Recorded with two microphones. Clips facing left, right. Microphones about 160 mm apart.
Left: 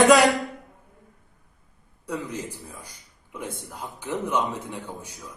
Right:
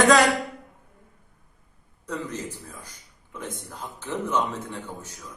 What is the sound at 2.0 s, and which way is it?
A man's voice, 10° left (ahead or behind).